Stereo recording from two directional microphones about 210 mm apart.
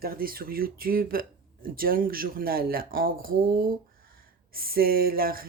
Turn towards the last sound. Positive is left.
turn(degrees=-45)  # may be behind; listen again after turning